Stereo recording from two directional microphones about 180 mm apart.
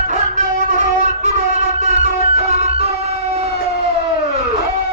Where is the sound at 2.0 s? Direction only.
35° right (ahead or behind).